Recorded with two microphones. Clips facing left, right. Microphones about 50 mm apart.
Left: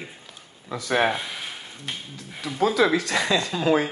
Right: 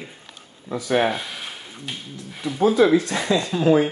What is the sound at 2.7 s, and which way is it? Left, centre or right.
Speech, left.